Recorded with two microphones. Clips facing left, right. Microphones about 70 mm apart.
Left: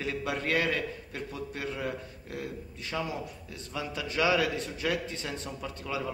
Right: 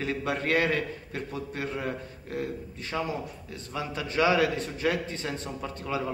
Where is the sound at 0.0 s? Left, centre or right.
Right.